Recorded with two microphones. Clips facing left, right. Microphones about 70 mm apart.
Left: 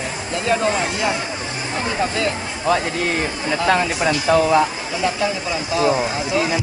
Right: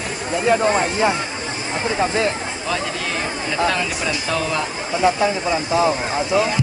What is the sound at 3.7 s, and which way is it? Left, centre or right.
Speech, left.